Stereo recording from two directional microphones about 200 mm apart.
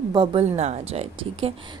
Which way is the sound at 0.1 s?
25° right (ahead or behind).